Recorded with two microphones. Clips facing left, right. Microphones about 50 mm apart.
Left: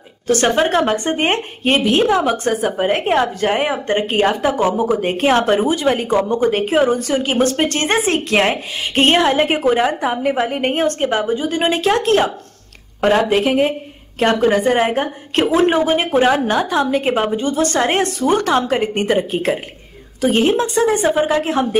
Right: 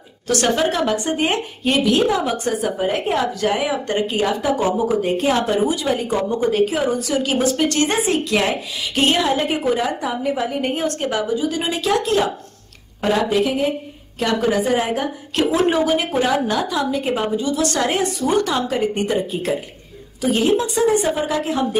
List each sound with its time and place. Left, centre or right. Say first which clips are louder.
0.3 s a woman's voice: left 4 dB; left
4.0 s a woman's voice: left 5 dB; left
8.0 s a woman's voice: left 3 dB; left
13.3 s a woman's voice: left 3 dB; left
18.2 s a woman's voice: left 4 dB; left